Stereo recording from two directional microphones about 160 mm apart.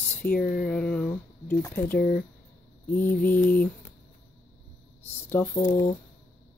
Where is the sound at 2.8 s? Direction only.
15° left (ahead or behind).